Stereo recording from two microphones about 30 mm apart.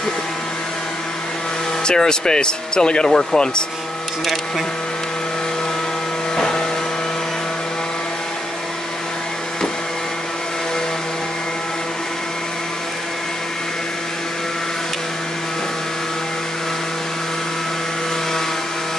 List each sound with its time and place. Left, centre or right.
1.9 s speech: left
3.1 s speech: centre
6.3 s vehicle: left